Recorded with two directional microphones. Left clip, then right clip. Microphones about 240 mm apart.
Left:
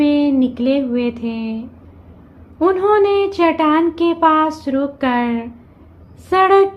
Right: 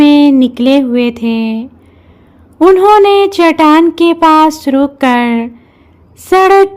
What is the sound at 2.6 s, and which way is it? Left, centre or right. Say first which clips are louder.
A woman's voice: right 9 dB; right.